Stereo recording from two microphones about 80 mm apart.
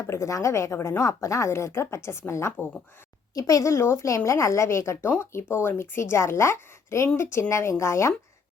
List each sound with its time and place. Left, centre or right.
0.0 s a woman's voice: left
3.3 s a woman's voice: left